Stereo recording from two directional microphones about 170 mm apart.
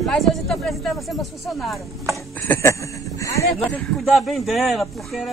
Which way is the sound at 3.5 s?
Centre (ahead or behind).